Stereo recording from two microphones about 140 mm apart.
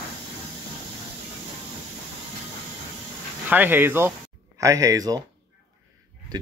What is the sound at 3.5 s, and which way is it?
Speech, 15° right (ahead or behind).